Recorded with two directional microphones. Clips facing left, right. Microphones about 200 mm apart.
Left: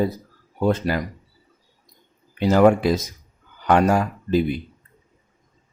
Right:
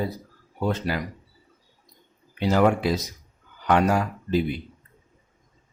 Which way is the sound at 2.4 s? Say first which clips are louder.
Left 5 dB; 45° left (ahead or behind).